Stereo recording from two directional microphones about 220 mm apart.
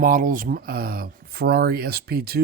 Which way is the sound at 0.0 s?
35° right (ahead or behind).